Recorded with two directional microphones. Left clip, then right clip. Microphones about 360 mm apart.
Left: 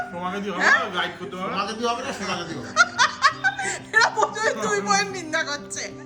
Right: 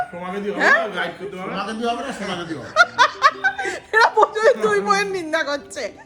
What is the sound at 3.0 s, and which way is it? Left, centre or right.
Speech, centre.